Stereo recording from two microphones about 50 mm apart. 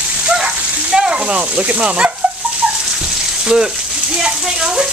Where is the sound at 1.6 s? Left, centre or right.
Right.